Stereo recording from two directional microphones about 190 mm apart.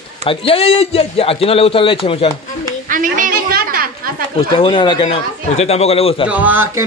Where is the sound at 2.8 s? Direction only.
45° right (ahead or behind).